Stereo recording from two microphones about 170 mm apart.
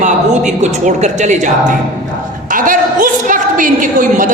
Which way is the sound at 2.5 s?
50° right (ahead or behind).